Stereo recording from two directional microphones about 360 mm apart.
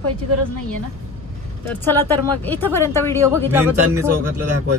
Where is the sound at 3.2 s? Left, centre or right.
Centre.